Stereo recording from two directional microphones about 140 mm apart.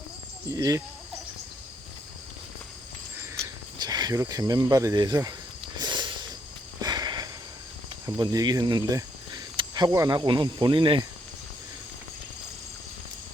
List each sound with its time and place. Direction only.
0.4 s speech: 25° right (ahead or behind)
3.2 s cricket: 25° right (ahead or behind)
5.7 s a sound: 30° right (ahead or behind)
8.0 s speech: 25° right (ahead or behind)
9.0 s cricket: 30° right (ahead or behind)
9.9 s speech: 25° right (ahead or behind)